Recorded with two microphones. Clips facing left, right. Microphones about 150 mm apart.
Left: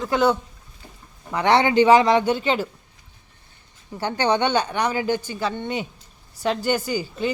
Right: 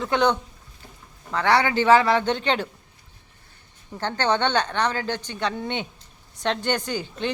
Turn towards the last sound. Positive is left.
turn(degrees=5)  # may be behind; listen again after turning